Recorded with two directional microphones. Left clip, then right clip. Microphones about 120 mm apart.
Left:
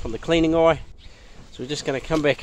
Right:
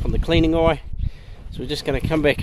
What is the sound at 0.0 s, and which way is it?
Speech, 25° right (ahead or behind).